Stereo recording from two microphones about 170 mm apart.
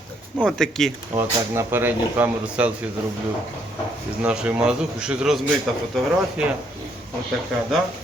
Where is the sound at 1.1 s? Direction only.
15° right (ahead or behind).